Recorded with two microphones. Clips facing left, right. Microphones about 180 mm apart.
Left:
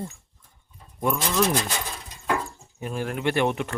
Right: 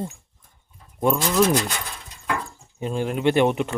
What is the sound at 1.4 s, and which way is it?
Speech, 25° right (ahead or behind).